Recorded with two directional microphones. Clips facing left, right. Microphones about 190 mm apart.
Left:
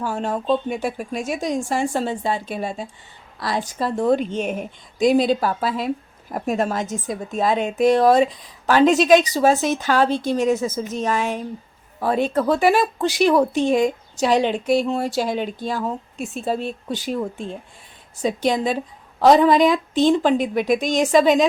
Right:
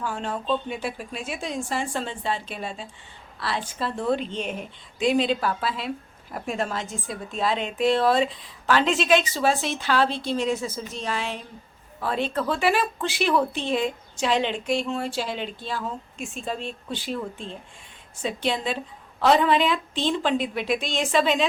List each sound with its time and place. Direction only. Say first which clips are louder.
0.0 s speech: left 5 dB; 40° left (ahead or behind)